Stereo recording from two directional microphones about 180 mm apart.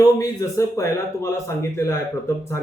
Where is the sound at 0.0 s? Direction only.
20° left (ahead or behind).